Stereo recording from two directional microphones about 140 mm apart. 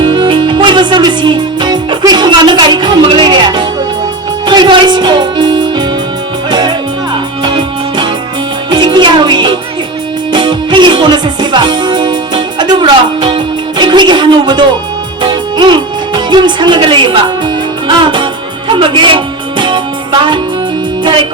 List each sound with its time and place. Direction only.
0.0 s music: 35° right (ahead or behind)
21.0 s music: 35° right (ahead or behind)